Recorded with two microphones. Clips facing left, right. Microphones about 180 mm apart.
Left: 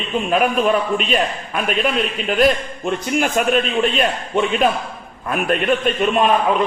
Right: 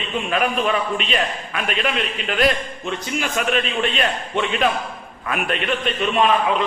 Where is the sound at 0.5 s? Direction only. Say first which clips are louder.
Left 4 dB; 45° left (ahead or behind).